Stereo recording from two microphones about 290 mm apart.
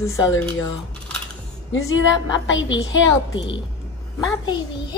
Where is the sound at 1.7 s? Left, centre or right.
Left.